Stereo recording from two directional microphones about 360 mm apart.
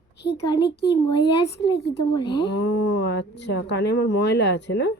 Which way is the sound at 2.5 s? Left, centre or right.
Left.